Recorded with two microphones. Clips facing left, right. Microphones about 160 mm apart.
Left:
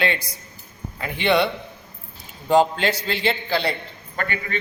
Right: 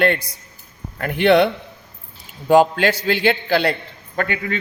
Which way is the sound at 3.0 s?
60° right (ahead or behind).